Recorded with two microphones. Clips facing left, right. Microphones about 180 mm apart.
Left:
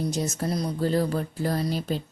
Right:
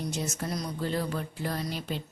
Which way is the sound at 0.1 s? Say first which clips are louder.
Left 5 dB; 40° left (ahead or behind).